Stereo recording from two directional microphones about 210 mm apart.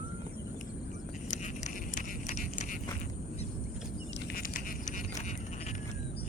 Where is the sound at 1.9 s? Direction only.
40° left (ahead or behind).